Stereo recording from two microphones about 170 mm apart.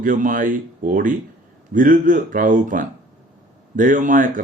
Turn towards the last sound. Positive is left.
turn(degrees=-50)  # may be behind; listen again after turning